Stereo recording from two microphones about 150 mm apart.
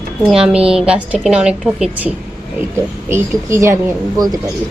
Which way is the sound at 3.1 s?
20° right (ahead or behind).